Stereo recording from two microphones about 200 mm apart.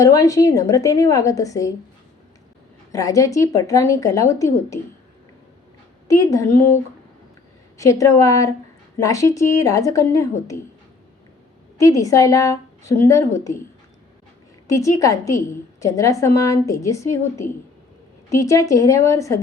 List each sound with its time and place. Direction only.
0.0 s a woman's voice: 15° left (ahead or behind)
2.9 s a woman's voice: 15° left (ahead or behind)
6.1 s a woman's voice: 15° left (ahead or behind)
7.8 s a woman's voice: 15° left (ahead or behind)
11.8 s a woman's voice: 15° left (ahead or behind)
14.7 s a woman's voice: 15° left (ahead or behind)